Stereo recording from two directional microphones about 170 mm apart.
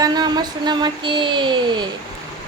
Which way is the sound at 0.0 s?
25° right (ahead or behind).